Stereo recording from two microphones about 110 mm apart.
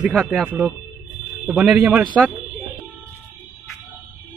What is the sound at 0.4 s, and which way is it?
Speech, 10° right (ahead or behind).